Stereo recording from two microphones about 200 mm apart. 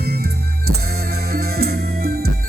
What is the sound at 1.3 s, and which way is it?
Music, 50° right (ahead or behind).